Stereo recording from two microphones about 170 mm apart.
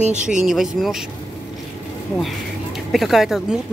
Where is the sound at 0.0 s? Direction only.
45° right (ahead or behind).